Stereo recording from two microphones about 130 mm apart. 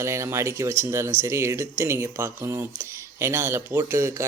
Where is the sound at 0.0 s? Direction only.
20° right (ahead or behind).